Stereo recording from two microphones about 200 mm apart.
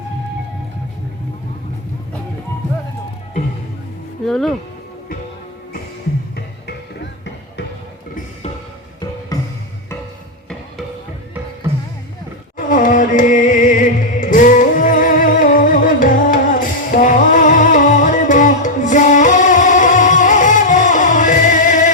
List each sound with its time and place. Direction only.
4.3 s speech: centre (ahead or behind)
6.3 s music: 55° left (ahead or behind)
9.3 s music: 20° left (ahead or behind)
12.5 s music: 40° left (ahead or behind)